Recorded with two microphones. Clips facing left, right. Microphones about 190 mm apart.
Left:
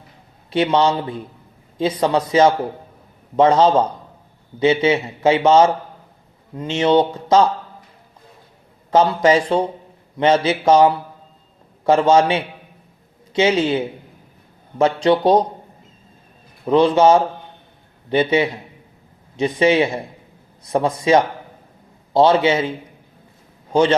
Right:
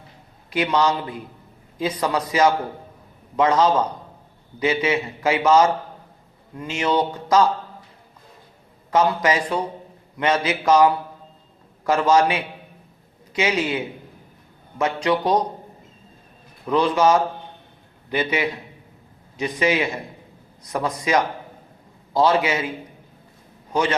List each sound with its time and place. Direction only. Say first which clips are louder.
0.5 s speech: left 4 dB; 30° left (ahead or behind)
8.9 s speech: left 5 dB; 30° left (ahead or behind)
16.6 s speech: left 5 dB; 25° left (ahead or behind)